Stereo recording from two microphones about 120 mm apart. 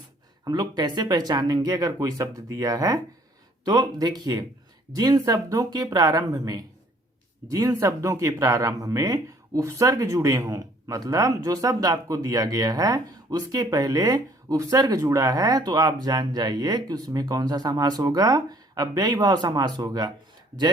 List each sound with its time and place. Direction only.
0.4 s speech: 35° right (ahead or behind)